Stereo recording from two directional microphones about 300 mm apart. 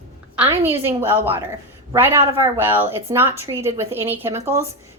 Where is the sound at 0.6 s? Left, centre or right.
Centre.